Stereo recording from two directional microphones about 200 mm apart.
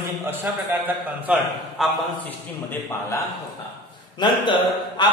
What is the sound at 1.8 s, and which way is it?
Mantra, centre (ahead or behind).